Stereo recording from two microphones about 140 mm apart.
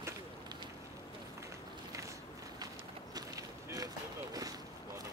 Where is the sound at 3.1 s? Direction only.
25° right (ahead or behind).